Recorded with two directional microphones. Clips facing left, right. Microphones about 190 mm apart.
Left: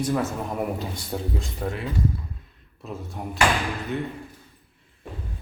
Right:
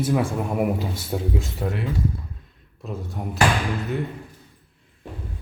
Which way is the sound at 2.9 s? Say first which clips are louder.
Right 2 dB; centre (ahead or behind).